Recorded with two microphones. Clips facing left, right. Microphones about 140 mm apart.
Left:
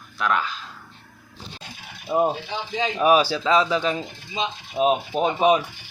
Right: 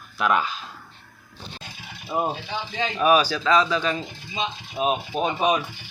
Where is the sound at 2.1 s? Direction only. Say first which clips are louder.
Left 4 dB; 10° left (ahead or behind).